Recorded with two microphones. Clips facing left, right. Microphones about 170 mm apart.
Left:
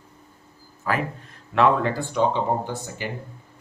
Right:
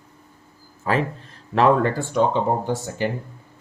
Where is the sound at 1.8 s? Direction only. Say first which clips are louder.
Right 2 dB; 50° right (ahead or behind).